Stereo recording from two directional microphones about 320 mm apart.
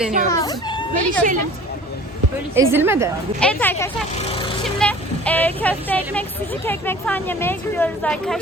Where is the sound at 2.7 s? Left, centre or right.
Centre.